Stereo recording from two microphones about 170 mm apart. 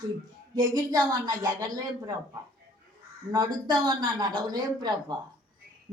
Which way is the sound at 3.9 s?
25° right (ahead or behind).